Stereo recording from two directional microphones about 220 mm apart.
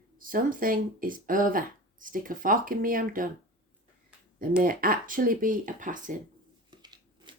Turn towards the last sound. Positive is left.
turn(degrees=-20)  # may be behind; listen again after turning